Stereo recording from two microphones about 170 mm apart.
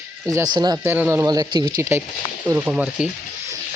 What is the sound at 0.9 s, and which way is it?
Speech, 15° right (ahead or behind).